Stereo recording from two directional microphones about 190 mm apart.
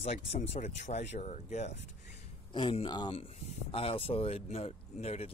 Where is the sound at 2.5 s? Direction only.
25° left (ahead or behind).